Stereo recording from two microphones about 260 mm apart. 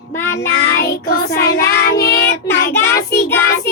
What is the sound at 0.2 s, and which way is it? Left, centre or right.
Child singing, centre.